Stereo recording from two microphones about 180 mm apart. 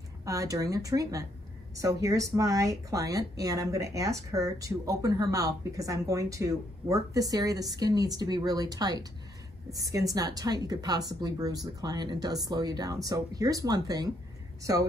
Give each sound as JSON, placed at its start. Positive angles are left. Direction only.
{"t": 0.2, "sound": "speech", "side_deg": -20}